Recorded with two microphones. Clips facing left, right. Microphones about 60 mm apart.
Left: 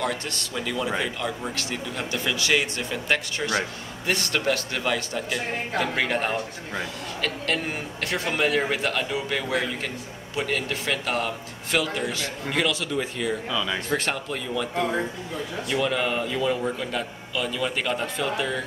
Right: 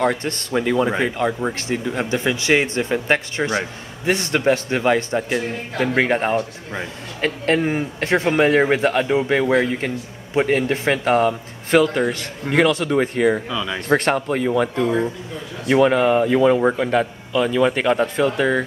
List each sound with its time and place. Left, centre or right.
0.0 s speech: right
13.5 s speech: centre
13.7 s speech: right